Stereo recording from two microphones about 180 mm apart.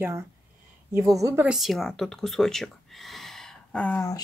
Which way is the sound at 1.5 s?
Centre (ahead or behind).